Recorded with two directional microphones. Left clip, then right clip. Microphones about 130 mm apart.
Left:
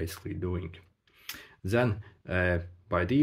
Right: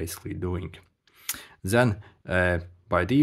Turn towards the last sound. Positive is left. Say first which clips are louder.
# right 4 dB
turn(degrees=-50)  # may be behind; listen again after turning